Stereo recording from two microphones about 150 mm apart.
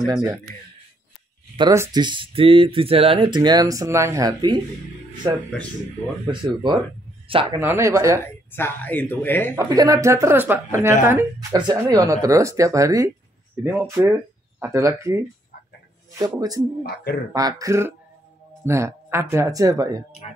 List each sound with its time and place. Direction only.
1.6 s speech: 25° right (ahead or behind)
6.4 s speech: 30° right (ahead or behind)
7.5 s speech: 20° right (ahead or behind)
8.2 s speech: 15° left (ahead or behind)
9.6 s speech: 25° right (ahead or behind)
11.3 s speech: 25° right (ahead or behind)
16.8 s speech: 90° left
17.3 s speech: 25° right (ahead or behind)